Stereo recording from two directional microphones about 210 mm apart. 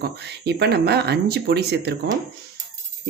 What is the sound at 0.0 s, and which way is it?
Speech, 50° right (ahead or behind).